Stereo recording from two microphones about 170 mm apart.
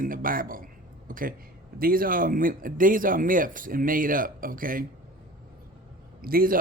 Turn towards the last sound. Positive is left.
turn(degrees=-55)  # may be behind; listen again after turning